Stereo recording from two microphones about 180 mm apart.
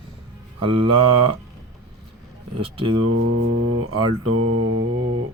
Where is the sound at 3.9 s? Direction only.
25° right (ahead or behind).